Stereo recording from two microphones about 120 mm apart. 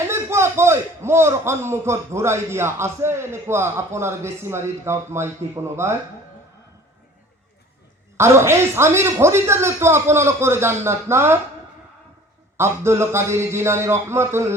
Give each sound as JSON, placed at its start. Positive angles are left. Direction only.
{"t": 0.1, "sound": "a man's voice", "side_deg": -20}
{"t": 8.1, "sound": "a man's voice", "side_deg": -20}
{"t": 12.5, "sound": "a man's voice", "side_deg": -20}